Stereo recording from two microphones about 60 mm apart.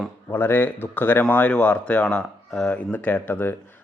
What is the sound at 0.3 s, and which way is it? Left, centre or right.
Speech, left.